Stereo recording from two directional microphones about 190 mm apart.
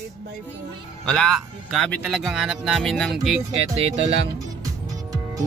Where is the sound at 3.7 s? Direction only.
30° right (ahead or behind).